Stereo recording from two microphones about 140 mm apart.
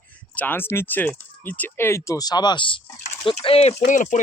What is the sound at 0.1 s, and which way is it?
Speech, 10° left (ahead or behind).